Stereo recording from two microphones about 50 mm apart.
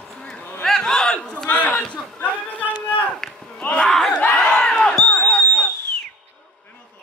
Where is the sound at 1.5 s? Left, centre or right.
Left.